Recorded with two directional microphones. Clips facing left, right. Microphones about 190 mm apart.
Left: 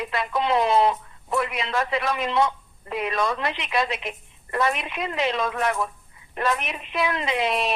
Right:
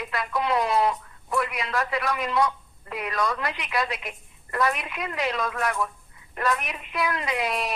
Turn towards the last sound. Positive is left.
turn(degrees=25)  # may be behind; listen again after turning